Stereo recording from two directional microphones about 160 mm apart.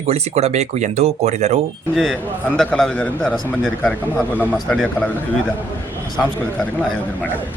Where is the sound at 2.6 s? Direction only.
5° left (ahead or behind).